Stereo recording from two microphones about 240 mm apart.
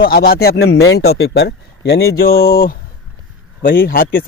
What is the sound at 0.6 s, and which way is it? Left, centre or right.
Speech, left.